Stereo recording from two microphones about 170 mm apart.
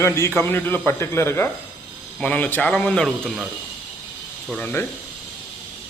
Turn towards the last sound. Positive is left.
turn(degrees=10)  # may be behind; listen again after turning